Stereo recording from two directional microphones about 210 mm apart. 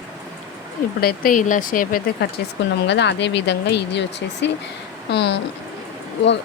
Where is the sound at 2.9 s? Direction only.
55° left (ahead or behind).